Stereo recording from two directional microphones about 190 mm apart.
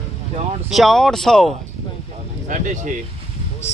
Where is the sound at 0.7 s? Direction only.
Centre (ahead or behind).